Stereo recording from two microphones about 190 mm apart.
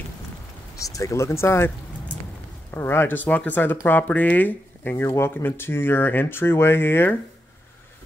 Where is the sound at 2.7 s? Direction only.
10° left (ahead or behind).